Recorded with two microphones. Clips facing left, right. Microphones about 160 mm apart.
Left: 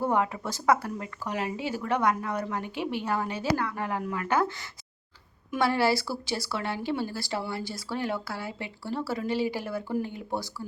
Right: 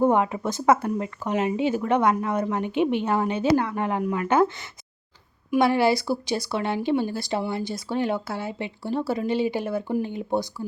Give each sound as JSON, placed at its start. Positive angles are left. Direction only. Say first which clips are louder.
{"t": 0.0, "sound": "speech", "louder": "right 6 dB", "side_deg": -20}